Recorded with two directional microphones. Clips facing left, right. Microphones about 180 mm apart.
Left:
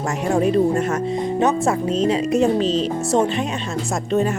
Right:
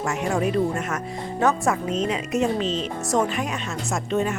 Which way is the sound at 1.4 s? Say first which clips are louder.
Left 2 dB; 20° left (ahead or behind).